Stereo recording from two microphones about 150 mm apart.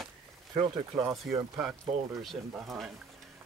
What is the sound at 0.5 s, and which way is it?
Speech, 35° right (ahead or behind).